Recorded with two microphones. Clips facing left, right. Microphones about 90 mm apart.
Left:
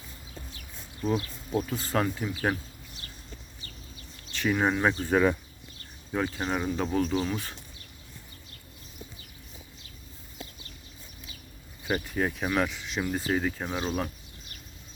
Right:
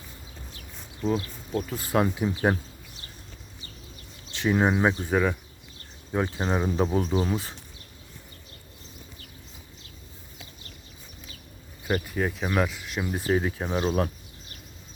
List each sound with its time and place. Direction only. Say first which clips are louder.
1.5 s speech: even; centre (ahead or behind)
1.8 s speech: right 3 dB; 10° right (ahead or behind)
2.2 s speech: right 5 dB; 25° right (ahead or behind)
4.3 s speech: right 3 dB; 20° right (ahead or behind)
5.0 s speech: left 1 dB; centre (ahead or behind)
6.2 s speech: right 2 dB; 25° right (ahead or behind)
11.9 s speech: right 2 dB; centre (ahead or behind)
13.1 s speech: right 3 dB; 20° right (ahead or behind)